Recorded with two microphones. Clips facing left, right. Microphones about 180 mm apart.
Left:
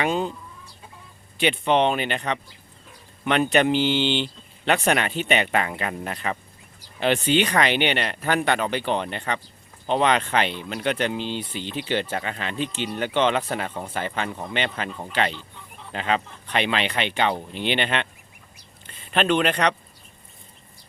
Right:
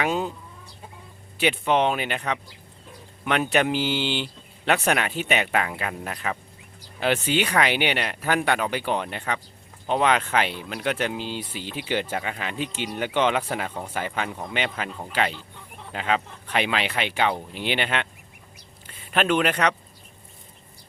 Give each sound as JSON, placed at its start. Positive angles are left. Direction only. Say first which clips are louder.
{"t": 0.0, "sound": "speech", "louder": "left 1 dB", "side_deg": -5}
{"t": 1.4, "sound": "speech", "louder": "left 1 dB", "side_deg": -5}